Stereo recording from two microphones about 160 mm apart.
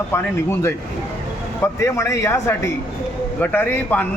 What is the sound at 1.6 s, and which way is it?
Speech, 15° left (ahead or behind).